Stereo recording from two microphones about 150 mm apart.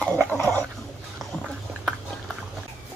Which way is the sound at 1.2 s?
Centre (ahead or behind).